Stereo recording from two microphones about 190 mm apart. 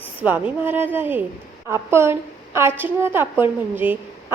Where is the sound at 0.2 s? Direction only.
10° right (ahead or behind).